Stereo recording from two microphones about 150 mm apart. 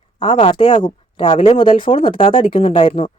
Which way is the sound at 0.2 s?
35° left (ahead or behind).